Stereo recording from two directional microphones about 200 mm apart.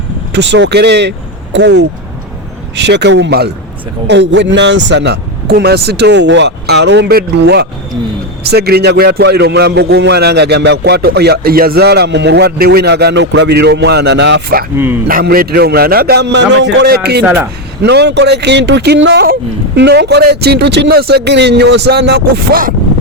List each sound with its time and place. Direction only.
0.3 s a man's voice: 60° right (ahead or behind)
17.2 s speech: 10° right (ahead or behind)
17.8 s a man's voice: 55° right (ahead or behind)